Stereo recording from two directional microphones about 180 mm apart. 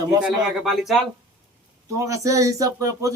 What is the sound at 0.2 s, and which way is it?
Speech, 5° right (ahead or behind).